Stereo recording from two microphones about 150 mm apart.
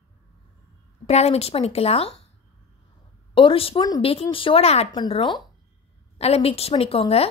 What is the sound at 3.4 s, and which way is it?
A woman's voice, 35° left (ahead or behind).